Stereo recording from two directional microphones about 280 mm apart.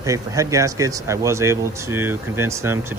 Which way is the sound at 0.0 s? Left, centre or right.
Centre.